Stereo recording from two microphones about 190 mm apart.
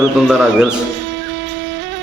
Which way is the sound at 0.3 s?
5° right (ahead or behind).